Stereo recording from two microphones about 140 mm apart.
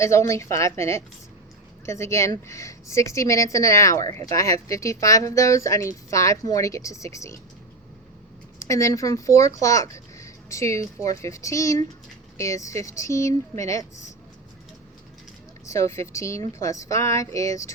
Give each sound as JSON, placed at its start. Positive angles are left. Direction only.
{"t": 0.0, "sound": "speech", "side_deg": 20}
{"t": 8.6, "sound": "speech", "side_deg": 20}
{"t": 15.6, "sound": "speech", "side_deg": 20}